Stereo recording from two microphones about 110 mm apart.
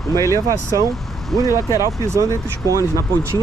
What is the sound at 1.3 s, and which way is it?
Speech, 5° left (ahead or behind).